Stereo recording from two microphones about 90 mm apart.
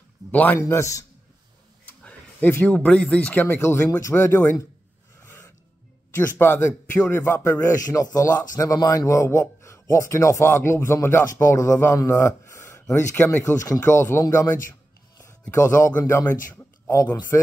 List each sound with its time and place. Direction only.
0.3 s a man's voice: 20° left (ahead or behind)
0.6 s speech: 35° left (ahead or behind)
1.9 s speech: 20° left (ahead or behind)
6.1 s a man's voice: 25° left (ahead or behind)
16.3 s a sound: 20° left (ahead or behind)
17.0 s a man's voice: 20° left (ahead or behind)